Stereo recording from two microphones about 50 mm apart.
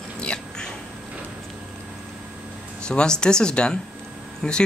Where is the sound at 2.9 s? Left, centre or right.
Centre.